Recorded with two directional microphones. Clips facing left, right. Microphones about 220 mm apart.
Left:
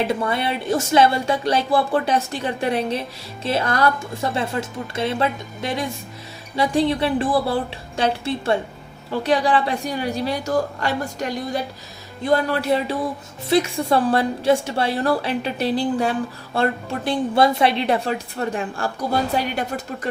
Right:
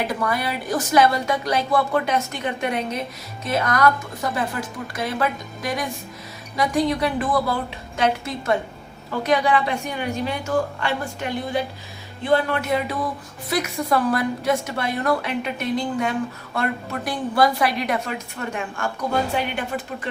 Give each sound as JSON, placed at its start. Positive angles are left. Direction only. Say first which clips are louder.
{"t": 0.1, "sound": "a woman's voice", "louder": "left 2 dB", "side_deg": 25}